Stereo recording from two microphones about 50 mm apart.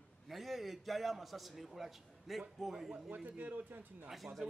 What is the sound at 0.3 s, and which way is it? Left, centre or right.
A man's voice, centre.